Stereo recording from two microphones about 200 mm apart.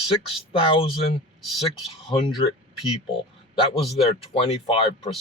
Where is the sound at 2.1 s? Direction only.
25° left (ahead or behind).